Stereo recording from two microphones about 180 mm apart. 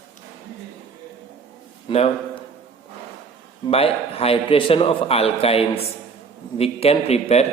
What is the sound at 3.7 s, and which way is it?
A man's voice, 35° left (ahead or behind).